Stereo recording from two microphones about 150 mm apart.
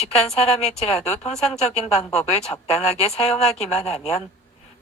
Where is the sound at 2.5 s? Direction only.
45° left (ahead or behind).